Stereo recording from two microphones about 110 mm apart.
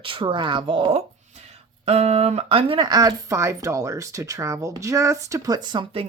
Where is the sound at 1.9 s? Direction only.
75° right (ahead or behind).